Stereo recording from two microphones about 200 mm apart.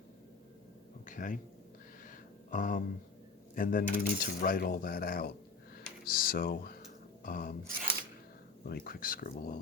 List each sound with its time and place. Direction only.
1.0 s speech: 40° left (ahead or behind)
2.0 s a sound: 40° left (ahead or behind)
3.5 s coin: 45° left (ahead or behind)
5.7 s speech: 50° left (ahead or behind)
7.3 s coin: 45° left (ahead or behind)
8.6 s coin: 50° left (ahead or behind)